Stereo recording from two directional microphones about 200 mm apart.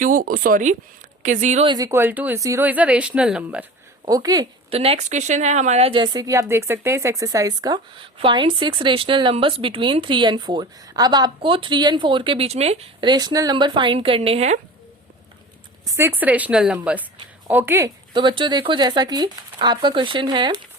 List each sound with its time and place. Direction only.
0.0 s speech: 45° right (ahead or behind)
1.6 s speech: 20° right (ahead or behind)
4.0 s speech: 20° right (ahead or behind)
4.7 s speech: 30° right (ahead or behind)
15.9 s speech: 10° right (ahead or behind)